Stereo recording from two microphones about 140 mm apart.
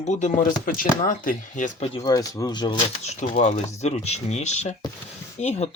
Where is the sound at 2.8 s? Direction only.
45° left (ahead or behind).